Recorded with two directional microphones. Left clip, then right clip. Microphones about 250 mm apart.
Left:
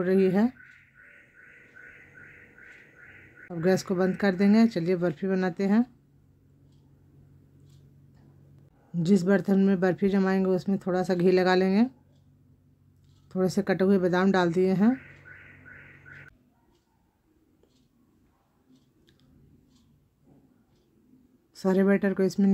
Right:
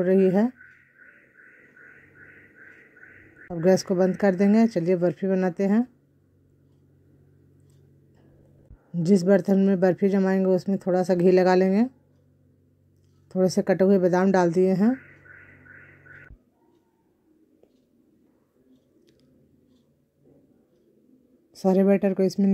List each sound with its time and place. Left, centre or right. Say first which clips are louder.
0.0 s speech: right 3 dB; centre
4.2 s speech: right 3 dB; centre
8.9 s speech: right 4 dB; centre
13.3 s speech: right 5 dB; centre
21.5 s speech: right 4 dB; centre